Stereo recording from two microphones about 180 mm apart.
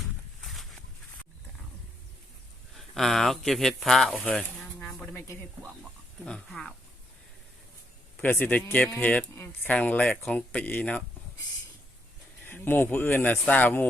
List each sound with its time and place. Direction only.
0.4 s a sound: centre (ahead or behind)
2.7 s speech: centre (ahead or behind)
6.2 s speech: 5° left (ahead or behind)
8.1 s speech: 10° left (ahead or behind)
12.5 s speech: 10° left (ahead or behind)